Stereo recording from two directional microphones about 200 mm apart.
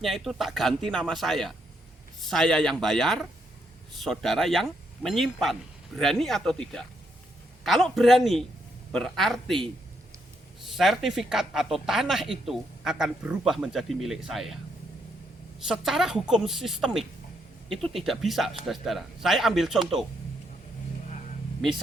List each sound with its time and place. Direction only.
0.0 s a woman's voice: centre (ahead or behind)
10.8 s a woman's voice: centre (ahead or behind)
15.6 s a woman's voice: 5° right (ahead or behind)